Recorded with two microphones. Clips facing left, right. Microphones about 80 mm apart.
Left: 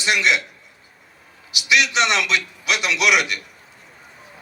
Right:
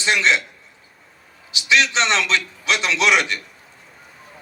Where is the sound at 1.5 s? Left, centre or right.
Right.